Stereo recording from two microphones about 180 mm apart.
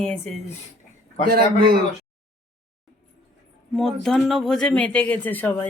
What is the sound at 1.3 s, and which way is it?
Speech, 55° right (ahead or behind).